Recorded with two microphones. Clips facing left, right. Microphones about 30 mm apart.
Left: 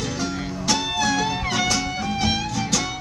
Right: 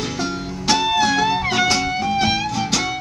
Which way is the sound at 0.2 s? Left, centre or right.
Right.